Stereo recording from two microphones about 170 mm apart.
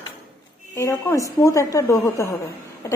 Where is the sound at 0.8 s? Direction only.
20° left (ahead or behind).